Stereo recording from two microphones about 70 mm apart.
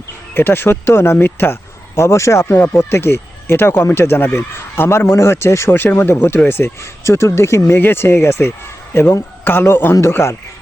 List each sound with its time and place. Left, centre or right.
0.3 s speech: left
2.0 s a man's voice: left